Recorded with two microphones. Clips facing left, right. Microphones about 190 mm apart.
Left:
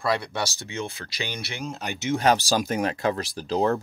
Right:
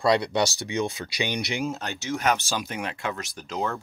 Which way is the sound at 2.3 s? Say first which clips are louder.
Left 5 dB; 35° left (ahead or behind).